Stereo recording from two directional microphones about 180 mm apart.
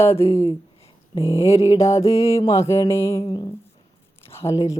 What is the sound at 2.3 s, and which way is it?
Speech, 15° left (ahead or behind).